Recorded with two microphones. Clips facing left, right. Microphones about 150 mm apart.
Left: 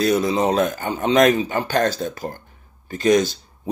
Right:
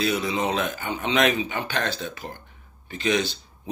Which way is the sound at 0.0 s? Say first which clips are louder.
Left 6 dB; 40° left (ahead or behind).